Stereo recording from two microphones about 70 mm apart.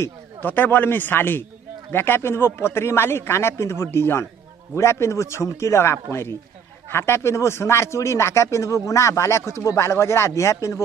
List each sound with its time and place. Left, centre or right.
0.4 s a man's voice: left